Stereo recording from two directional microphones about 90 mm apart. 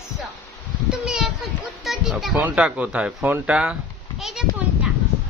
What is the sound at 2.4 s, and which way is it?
Speech, 15° right (ahead or behind).